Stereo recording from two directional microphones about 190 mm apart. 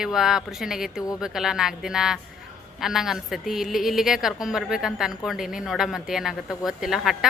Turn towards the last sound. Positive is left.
turn(degrees=0)  # may be behind; listen again after turning